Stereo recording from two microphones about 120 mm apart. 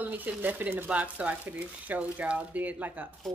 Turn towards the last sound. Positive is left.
turn(degrees=-15)  # may be behind; listen again after turning